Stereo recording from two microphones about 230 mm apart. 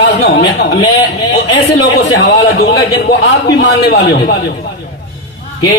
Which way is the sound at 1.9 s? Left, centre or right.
Left.